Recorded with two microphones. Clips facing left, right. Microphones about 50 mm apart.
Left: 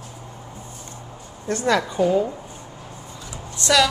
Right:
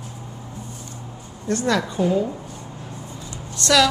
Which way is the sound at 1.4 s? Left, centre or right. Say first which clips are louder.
Left 1 dB; left.